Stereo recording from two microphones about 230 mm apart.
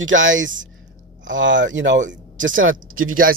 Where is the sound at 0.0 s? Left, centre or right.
Right.